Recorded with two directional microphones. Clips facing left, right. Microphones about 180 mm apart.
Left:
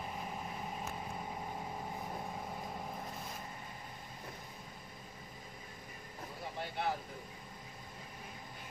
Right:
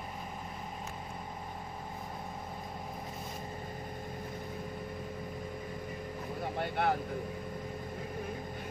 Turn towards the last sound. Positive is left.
turn(degrees=-60)  # may be behind; listen again after turning